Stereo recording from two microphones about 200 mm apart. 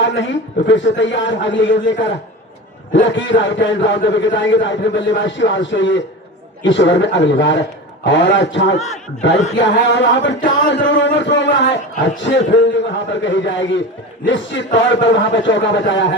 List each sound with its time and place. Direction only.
0.0 s a man's voice: 65° left (ahead or behind)